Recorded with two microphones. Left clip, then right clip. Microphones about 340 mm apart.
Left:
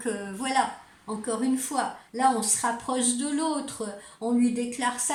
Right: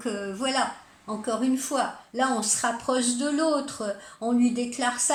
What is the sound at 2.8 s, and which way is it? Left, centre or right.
Speech, centre.